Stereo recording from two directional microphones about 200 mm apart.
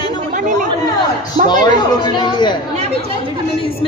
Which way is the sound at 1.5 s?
20° left (ahead or behind).